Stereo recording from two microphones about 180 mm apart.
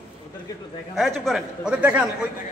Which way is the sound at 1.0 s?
Centre (ahead or behind).